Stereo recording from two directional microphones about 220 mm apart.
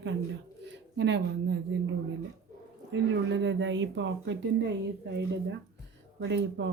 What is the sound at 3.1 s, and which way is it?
Speech, 55° right (ahead or behind).